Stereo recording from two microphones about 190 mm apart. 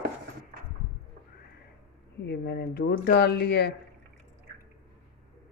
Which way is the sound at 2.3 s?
60° left (ahead or behind).